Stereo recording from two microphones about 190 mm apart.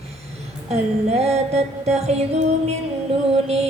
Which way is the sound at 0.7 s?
35° right (ahead or behind).